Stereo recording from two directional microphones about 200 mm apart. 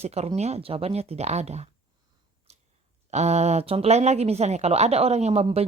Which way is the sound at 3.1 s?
35° right (ahead or behind).